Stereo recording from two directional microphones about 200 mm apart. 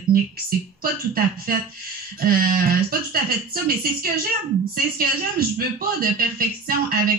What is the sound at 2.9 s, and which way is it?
Speech, 45° right (ahead or behind).